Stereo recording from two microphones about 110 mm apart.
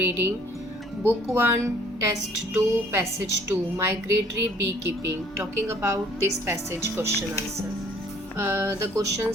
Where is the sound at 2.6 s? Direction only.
25° right (ahead or behind).